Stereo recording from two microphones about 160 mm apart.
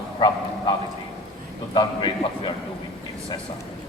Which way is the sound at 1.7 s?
30° left (ahead or behind).